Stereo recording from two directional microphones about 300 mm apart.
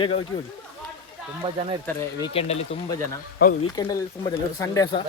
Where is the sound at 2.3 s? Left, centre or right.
Centre.